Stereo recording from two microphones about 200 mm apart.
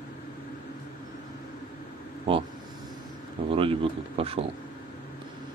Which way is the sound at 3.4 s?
25° right (ahead or behind).